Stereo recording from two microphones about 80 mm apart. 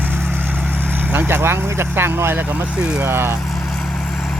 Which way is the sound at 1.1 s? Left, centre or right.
Right.